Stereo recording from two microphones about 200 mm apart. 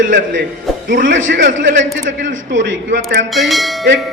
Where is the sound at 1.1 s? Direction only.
70° right (ahead or behind).